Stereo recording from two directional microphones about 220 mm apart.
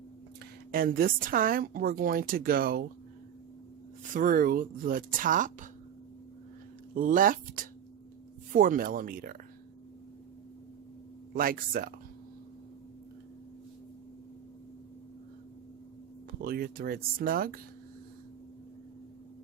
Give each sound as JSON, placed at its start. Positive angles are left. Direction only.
{"t": 0.7, "sound": "a woman's voice", "side_deg": -40}
{"t": 4.1, "sound": "a woman's voice", "side_deg": -40}
{"t": 6.9, "sound": "a woman's voice", "side_deg": -40}
{"t": 11.3, "sound": "a woman's voice", "side_deg": -40}
{"t": 16.4, "sound": "a woman's voice", "side_deg": -40}